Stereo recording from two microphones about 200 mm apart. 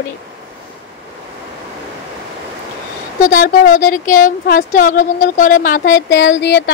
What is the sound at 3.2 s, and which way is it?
Speech, 45° left (ahead or behind).